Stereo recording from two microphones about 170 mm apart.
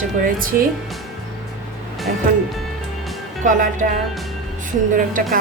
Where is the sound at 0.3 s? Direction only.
55° right (ahead or behind).